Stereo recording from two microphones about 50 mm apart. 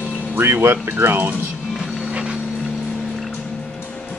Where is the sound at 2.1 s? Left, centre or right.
Centre.